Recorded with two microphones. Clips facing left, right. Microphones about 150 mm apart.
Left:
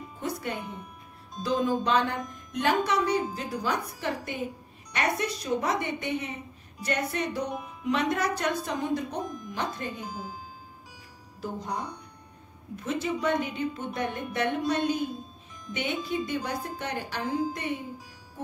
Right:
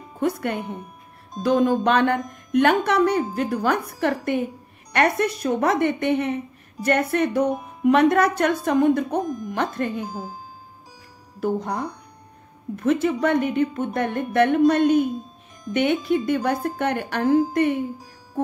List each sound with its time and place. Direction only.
0.2 s speech: 60° right (ahead or behind)
7.5 s music: 40° right (ahead or behind)
7.9 s speech: 60° right (ahead or behind)
9.3 s speech: 45° right (ahead or behind)
9.6 s speech: 60° right (ahead or behind)
10.0 s speech: 45° right (ahead or behind)
11.3 s speech: 65° right (ahead or behind)